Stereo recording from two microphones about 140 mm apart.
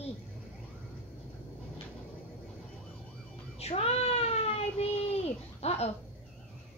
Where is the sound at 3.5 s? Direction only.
45° left (ahead or behind).